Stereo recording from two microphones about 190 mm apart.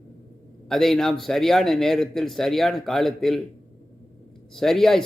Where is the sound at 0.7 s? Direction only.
Centre (ahead or behind).